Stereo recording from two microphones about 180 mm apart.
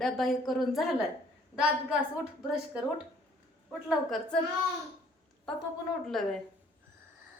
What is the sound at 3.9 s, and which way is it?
Speech, centre (ahead or behind).